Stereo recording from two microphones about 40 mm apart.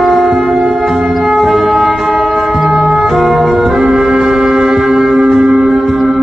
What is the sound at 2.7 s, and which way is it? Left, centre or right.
Music, right.